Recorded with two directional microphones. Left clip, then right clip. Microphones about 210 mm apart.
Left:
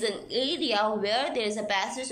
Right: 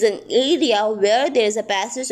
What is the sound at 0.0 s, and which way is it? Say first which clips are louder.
A woman's voice: right 11 dB; 35° right (ahead or behind).